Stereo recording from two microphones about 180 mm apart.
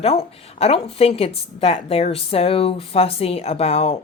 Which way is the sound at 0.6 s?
35° left (ahead or behind).